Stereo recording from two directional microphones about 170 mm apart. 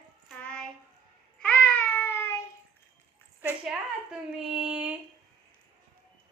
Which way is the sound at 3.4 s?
10° right (ahead or behind).